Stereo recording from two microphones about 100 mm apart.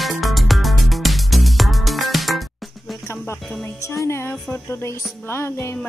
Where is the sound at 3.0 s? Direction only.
25° left (ahead or behind).